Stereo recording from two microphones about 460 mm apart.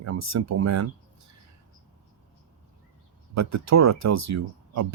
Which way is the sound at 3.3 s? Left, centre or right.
Right.